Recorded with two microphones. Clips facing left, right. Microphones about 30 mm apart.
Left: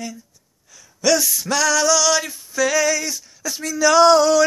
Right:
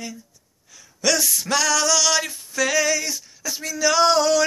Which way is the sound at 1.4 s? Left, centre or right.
Right.